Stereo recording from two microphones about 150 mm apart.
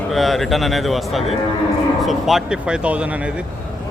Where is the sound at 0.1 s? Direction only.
Centre (ahead or behind).